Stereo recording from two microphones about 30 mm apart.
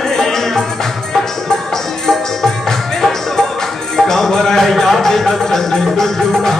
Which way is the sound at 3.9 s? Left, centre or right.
Centre.